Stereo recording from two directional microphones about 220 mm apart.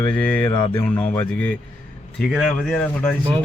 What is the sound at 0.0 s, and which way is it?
A man's voice, 10° left (ahead or behind).